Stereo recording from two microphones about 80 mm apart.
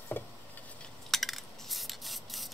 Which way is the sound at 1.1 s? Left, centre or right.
Centre.